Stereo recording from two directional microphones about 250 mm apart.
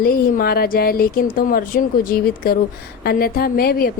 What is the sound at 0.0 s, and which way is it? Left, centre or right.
A woman's voice, left.